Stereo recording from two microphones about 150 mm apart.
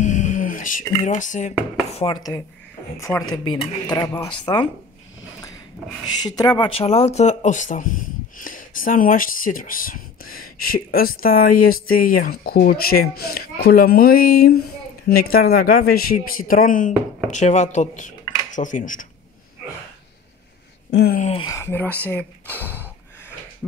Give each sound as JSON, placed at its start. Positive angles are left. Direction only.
{"t": 0.0, "sound": "a sound", "side_deg": 55}
{"t": 1.0, "sound": "speech", "side_deg": 55}
{"t": 1.9, "sound": "speech", "side_deg": 45}
{"t": 2.1, "sound": "speech", "side_deg": 25}
{"t": 6.2, "sound": "speech", "side_deg": 25}
{"t": 17.3, "sound": "speech", "side_deg": 50}
{"t": 21.2, "sound": "speech", "side_deg": 40}
{"t": 21.5, "sound": "speech", "side_deg": 15}